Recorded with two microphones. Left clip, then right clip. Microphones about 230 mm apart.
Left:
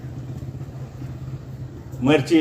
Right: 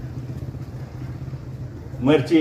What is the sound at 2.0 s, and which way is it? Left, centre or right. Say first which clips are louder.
Speech: even; left.